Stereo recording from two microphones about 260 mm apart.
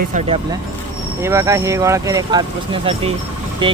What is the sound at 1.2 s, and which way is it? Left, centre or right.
Speech, centre.